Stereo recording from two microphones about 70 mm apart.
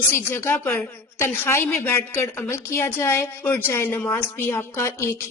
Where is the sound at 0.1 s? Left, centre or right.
Left.